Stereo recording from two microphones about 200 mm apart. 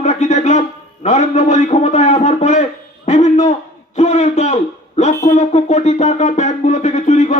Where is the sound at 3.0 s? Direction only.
35° left (ahead or behind).